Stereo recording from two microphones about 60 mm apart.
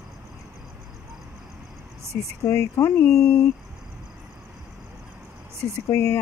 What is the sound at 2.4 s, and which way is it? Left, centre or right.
Speech, left.